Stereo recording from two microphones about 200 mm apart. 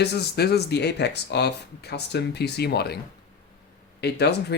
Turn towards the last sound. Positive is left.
turn(degrees=55)  # may be behind; listen again after turning